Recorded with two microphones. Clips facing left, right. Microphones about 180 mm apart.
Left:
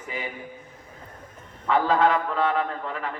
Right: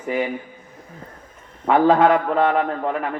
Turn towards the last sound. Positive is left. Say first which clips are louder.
# right 8 dB
turn(degrees=-55)  # may be behind; listen again after turning